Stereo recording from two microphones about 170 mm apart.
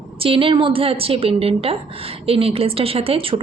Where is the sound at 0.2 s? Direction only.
30° right (ahead or behind).